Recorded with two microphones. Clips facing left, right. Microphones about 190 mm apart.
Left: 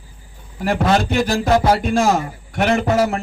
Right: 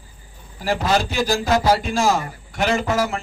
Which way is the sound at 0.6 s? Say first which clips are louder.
Left 3 dB; 60° left (ahead or behind).